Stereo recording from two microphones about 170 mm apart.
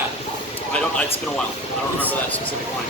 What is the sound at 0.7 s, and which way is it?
Speech, 5° left (ahead or behind).